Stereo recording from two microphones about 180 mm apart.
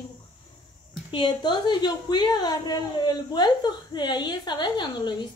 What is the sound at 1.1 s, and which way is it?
A woman's voice, 25° left (ahead or behind).